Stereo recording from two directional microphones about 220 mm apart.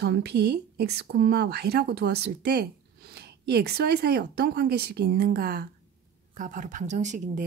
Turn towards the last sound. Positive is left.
turn(degrees=-35)  # may be behind; listen again after turning